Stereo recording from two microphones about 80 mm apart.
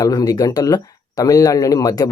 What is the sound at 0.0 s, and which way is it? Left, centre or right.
Speech, left.